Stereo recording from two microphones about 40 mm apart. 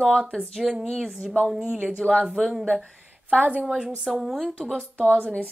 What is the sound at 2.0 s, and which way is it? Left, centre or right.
Speech, centre.